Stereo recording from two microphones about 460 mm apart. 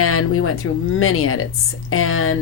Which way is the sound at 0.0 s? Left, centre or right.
Left.